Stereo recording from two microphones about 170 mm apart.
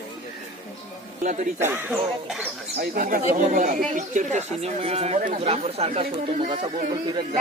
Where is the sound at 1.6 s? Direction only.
15° right (ahead or behind).